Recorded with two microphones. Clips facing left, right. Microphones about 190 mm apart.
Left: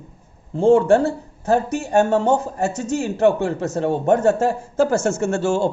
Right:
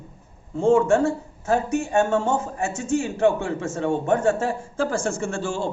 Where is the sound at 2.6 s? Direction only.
40° left (ahead or behind).